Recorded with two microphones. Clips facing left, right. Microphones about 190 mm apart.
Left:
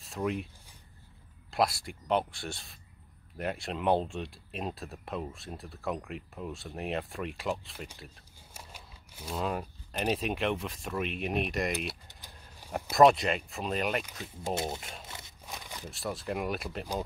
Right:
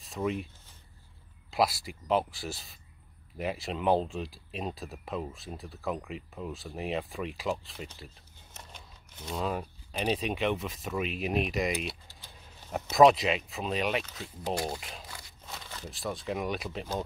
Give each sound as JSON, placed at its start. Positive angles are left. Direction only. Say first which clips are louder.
{"t": 0.0, "sound": "speech", "louder": "right 1 dB", "side_deg": 0}
{"t": 1.5, "sound": "speech", "louder": "right 1 dB", "side_deg": 0}
{"t": 12.1, "sound": "keys jangling", "louder": "even", "side_deg": 15}
{"t": 12.9, "sound": "speech", "louder": "right 1 dB", "side_deg": 0}
{"t": 14.5, "sound": "speech", "louder": "right 1 dB", "side_deg": 20}
{"t": 14.8, "sound": "speech", "louder": "even", "side_deg": 0}
{"t": 15.0, "sound": "a sound", "louder": "left 1 dB", "side_deg": 20}
{"t": 15.8, "sound": "speech", "louder": "right 1 dB", "side_deg": 0}